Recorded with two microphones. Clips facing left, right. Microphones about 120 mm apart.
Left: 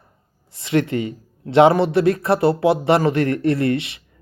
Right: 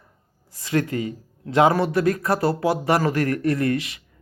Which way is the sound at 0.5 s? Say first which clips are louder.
Left 4 dB; 25° left (ahead or behind).